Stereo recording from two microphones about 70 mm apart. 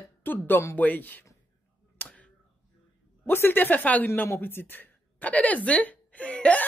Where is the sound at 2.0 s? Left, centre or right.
Centre.